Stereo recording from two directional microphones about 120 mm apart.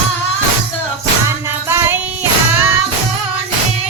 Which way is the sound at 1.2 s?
20° right (ahead or behind).